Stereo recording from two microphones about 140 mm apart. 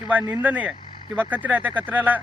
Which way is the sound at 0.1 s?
10° right (ahead or behind).